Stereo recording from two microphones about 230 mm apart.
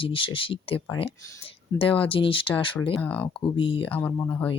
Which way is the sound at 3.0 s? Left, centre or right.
Centre.